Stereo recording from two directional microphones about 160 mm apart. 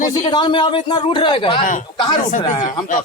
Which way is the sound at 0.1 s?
30° left (ahead or behind).